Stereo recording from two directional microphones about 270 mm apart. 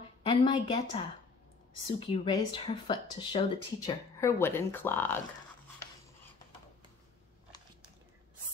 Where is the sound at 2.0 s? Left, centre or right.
Centre.